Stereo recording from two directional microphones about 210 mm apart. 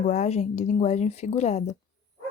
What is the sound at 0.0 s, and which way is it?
Speech, 35° left (ahead or behind).